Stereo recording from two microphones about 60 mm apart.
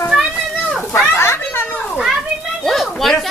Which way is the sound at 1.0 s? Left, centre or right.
Left.